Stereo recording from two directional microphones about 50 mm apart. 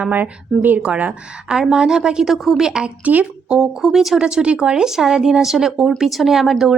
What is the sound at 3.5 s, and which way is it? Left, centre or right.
Speech, centre.